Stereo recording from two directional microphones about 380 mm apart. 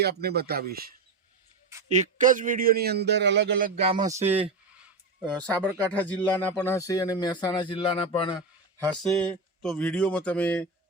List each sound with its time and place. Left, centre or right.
0.0 s a man's voice: right
4.0 s speech: centre
5.2 s speech: centre